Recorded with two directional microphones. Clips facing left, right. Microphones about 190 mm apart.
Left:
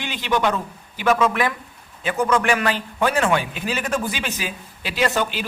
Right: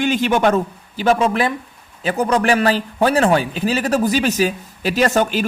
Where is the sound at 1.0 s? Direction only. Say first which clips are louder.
Right 3 dB; 30° right (ahead or behind).